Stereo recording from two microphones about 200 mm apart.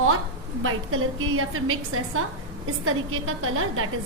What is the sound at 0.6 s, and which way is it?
A woman's voice, 90° right.